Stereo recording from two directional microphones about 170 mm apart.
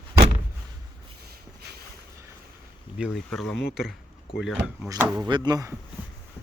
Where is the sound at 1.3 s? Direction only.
65° right (ahead or behind).